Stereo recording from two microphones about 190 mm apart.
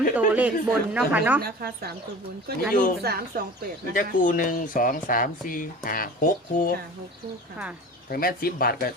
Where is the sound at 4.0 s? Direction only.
45° left (ahead or behind).